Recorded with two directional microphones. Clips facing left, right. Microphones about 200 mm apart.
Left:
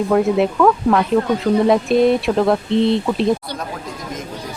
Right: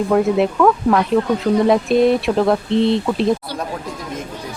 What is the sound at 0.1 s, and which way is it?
Speech, centre (ahead or behind).